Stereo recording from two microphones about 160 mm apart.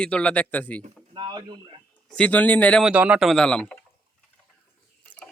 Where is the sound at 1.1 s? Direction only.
25° right (ahead or behind).